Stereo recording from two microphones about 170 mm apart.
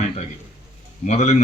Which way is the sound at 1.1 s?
40° left (ahead or behind).